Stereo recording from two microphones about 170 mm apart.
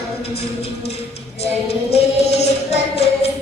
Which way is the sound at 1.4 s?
40° left (ahead or behind).